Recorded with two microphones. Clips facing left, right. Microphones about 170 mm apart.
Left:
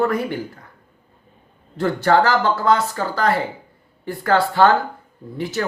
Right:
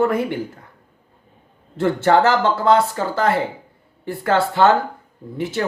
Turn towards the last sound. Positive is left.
turn(degrees=-25)  # may be behind; listen again after turning